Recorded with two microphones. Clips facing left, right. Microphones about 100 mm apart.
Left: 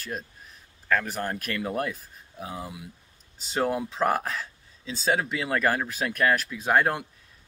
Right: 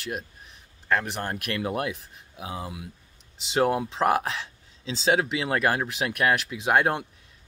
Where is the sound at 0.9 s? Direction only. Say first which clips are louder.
Even; 20° right (ahead or behind).